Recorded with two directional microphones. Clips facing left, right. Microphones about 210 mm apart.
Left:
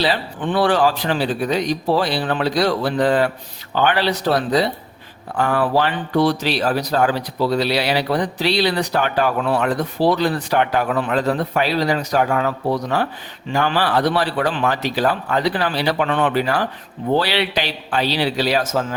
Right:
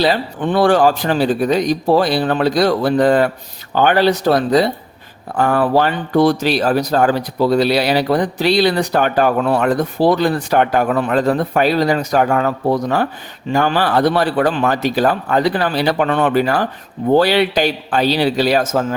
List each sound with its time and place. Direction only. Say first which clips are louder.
0.0 s speech: right 4 dB; 45° right (ahead or behind)